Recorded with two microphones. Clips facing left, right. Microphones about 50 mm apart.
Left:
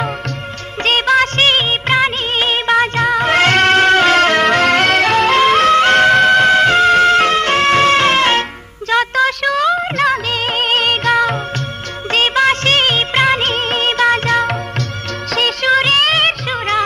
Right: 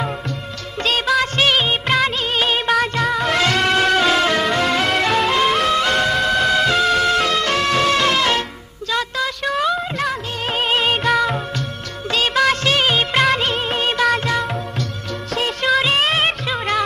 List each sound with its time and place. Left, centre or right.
0.8 s music of bollywood: left
2.7 s music: left
5.4 s music: left
10.0 s music: left
10.9 s music: centre
12.1 s music of bollywood: left
13.4 s music: left
15.3 s music of bollywood: left
15.8 s music: left